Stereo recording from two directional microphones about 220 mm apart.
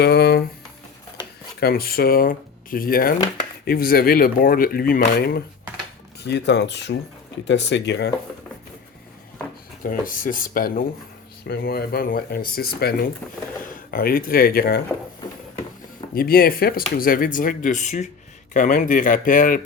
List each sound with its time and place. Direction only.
0.0 s a sound: 50° left (ahead or behind)
1.5 s speech: 45° left (ahead or behind)
9.8 s speech: 40° left (ahead or behind)
16.1 s speech: 40° left (ahead or behind)